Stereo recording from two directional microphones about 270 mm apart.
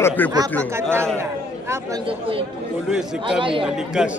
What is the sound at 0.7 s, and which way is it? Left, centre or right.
Speech, centre.